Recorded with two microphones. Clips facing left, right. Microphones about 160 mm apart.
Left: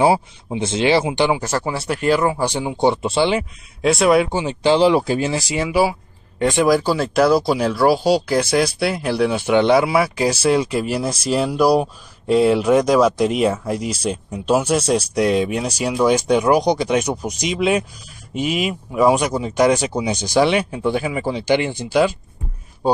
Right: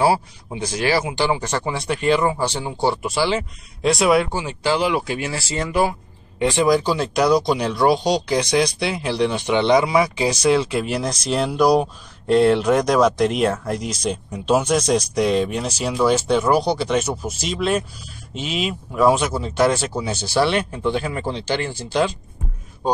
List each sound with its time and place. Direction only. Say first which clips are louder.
0.0 s speech: left 2 dB; 20° left (ahead or behind)
1.4 s speech: left 2 dB; 5° left (ahead or behind); by 3.3 s 25° left (ahead or behind)
3.3 s speech: left 3 dB; centre (ahead or behind)
4.3 s speech: left 5 dB; 20° left (ahead or behind)
5.3 s speech: left 3 dB; 15° left (ahead or behind)